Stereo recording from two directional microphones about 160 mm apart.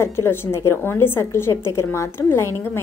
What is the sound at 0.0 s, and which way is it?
A woman's voice, 15° left (ahead or behind).